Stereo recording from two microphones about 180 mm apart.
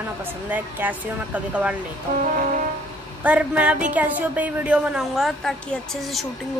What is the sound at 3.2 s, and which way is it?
A woman's voice, 5° right (ahead or behind).